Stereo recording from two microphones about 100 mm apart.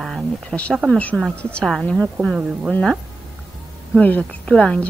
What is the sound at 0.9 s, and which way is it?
Speech, 15° left (ahead or behind).